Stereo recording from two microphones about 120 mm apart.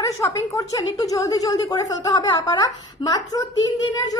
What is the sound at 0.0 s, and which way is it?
A woman's voice, 25° left (ahead or behind).